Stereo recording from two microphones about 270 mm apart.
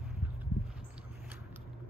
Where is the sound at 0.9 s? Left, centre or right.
Centre.